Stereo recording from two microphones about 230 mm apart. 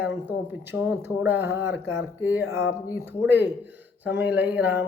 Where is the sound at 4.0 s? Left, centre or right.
Centre.